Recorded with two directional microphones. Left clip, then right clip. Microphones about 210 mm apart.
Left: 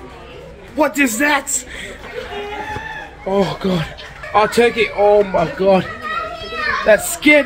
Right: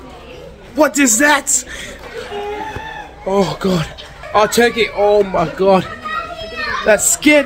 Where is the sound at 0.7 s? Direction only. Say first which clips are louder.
Right 3 dB; 20° right (ahead or behind).